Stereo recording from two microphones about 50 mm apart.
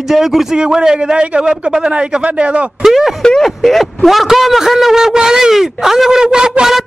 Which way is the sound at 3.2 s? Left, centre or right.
Centre.